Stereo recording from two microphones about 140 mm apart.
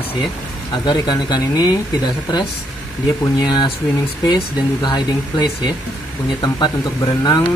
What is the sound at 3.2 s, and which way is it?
Speech, 30° left (ahead or behind).